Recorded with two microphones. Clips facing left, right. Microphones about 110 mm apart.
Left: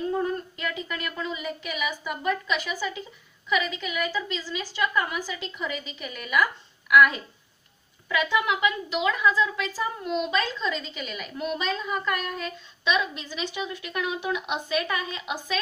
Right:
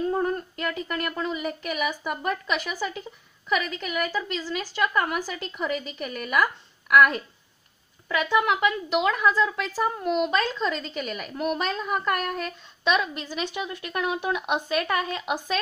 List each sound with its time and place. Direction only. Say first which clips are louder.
0.1 s a woman's voice: right 1 dB; 45° right (ahead or behind)